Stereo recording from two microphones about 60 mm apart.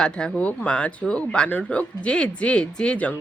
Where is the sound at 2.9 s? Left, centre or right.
Left.